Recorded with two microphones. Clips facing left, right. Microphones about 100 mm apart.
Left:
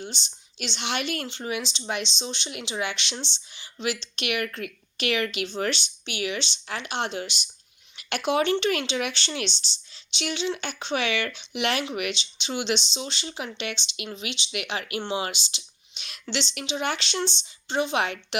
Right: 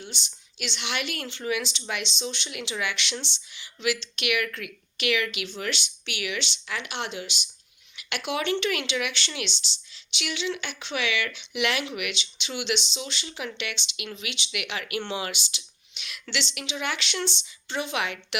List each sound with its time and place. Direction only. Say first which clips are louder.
0.0 s speech: left 3 dB; 30° left (ahead or behind)